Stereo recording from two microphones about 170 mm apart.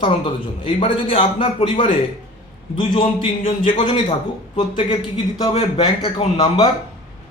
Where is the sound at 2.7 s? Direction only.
30° left (ahead or behind).